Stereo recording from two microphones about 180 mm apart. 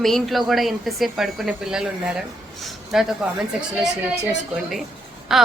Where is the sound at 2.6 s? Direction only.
Centre (ahead or behind).